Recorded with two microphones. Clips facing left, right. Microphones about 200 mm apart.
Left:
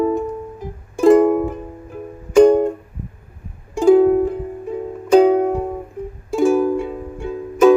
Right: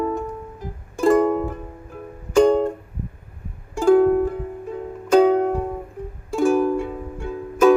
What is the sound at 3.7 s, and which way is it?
Music, 15° left (ahead or behind).